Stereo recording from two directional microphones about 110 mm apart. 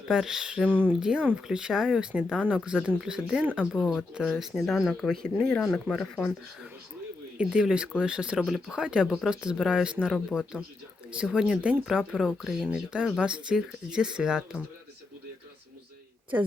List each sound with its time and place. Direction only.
0.1 s speech: 5° right (ahead or behind)
0.7 s speech: 15° right (ahead or behind); by 6.2 s 5° left (ahead or behind)
7.3 s speech: 10° right (ahead or behind)